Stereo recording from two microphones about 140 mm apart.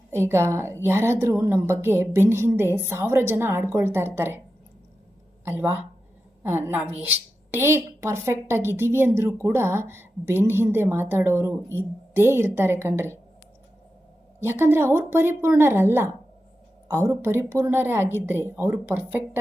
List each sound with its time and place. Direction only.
0.1 s a woman's voice: 20° right (ahead or behind)
5.5 s a woman's voice: 15° right (ahead or behind)
14.4 s a woman's voice: 15° right (ahead or behind)